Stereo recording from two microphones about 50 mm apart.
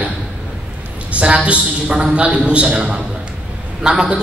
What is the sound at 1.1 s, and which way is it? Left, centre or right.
A woman's voice, right.